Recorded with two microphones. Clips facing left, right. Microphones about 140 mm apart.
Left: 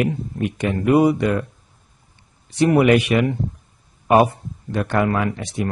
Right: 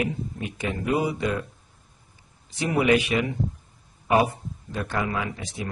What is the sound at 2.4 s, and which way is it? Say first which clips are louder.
Speech: left 7 dB; 65° left (ahead or behind).